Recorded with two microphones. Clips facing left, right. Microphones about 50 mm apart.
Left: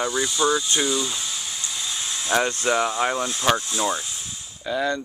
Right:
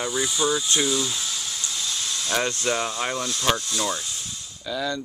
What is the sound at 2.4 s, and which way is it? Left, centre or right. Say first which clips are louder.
Speech: left 3 dB; left.